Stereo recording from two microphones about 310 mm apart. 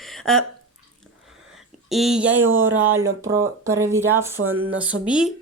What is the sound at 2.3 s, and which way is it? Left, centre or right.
Speech, right.